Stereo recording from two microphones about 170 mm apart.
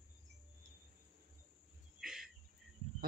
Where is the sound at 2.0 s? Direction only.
5° right (ahead or behind).